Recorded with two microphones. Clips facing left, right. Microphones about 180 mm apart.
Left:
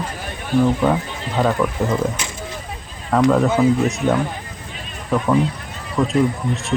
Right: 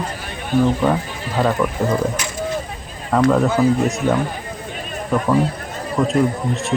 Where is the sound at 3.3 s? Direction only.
Centre (ahead or behind).